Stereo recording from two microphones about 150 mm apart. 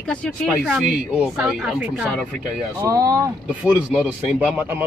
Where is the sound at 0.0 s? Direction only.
5° left (ahead or behind).